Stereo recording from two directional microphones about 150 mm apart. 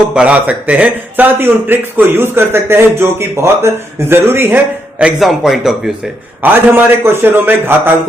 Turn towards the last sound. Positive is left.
turn(degrees=-15)  # may be behind; listen again after turning